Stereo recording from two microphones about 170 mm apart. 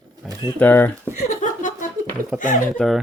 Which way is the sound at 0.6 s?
10° left (ahead or behind).